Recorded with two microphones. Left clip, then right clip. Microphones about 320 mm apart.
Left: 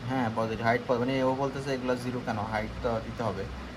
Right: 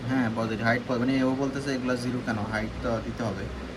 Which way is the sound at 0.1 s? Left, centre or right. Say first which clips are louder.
Right 1 dB; left.